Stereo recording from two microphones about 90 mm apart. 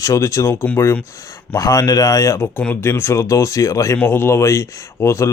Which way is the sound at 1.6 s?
40° left (ahead or behind).